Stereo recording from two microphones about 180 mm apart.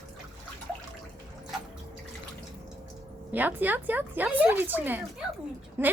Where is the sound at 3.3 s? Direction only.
10° right (ahead or behind).